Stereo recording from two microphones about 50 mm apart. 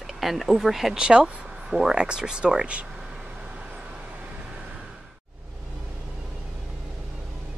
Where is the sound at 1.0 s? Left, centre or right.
Centre.